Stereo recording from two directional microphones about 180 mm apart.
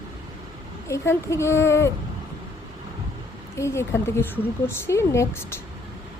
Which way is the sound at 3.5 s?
15° left (ahead or behind).